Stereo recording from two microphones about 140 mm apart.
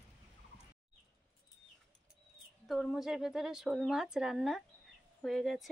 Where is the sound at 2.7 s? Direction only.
Centre (ahead or behind).